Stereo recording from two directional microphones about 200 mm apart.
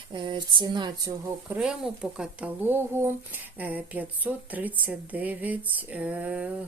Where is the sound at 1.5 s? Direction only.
5° right (ahead or behind).